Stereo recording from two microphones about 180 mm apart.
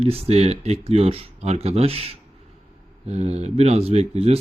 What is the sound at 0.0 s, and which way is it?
Speech, 35° right (ahead or behind).